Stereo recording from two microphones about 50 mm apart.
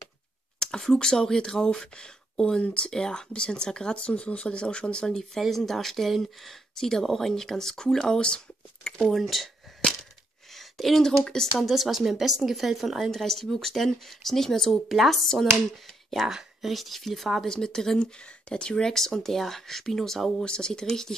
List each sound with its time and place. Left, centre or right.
0.6 s speech: centre
8.8 s a sound: centre
9.1 s a woman's voice: centre
10.5 s speech: centre
11.6 s a woman's voice: centre
16.3 s a woman's voice: centre
17.5 s speech: centre
20.4 s speech: centre